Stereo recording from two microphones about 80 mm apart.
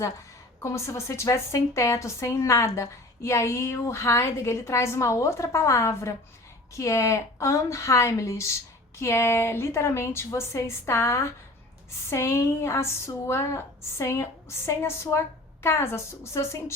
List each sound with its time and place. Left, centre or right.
0.6 s speech: left